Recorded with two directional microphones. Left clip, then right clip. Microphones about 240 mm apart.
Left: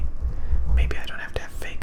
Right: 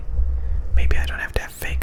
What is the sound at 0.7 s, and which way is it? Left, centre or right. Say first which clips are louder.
Whispering: right 5 dB; centre.